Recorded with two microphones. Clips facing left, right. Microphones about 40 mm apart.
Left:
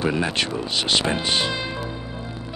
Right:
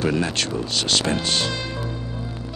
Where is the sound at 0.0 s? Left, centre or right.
Centre.